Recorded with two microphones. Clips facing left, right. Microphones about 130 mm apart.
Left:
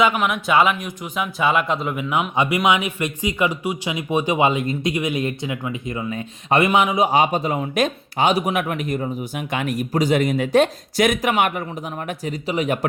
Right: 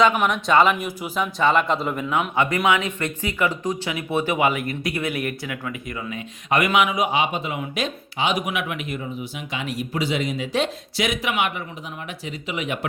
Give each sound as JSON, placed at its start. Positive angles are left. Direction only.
{"t": 0.0, "sound": "speech", "side_deg": 5}
{"t": 1.2, "sound": "speech", "side_deg": 5}
{"t": 2.3, "sound": "speech", "side_deg": 15}
{"t": 7.2, "sound": "speech", "side_deg": 40}
{"t": 9.5, "sound": "speech", "side_deg": 50}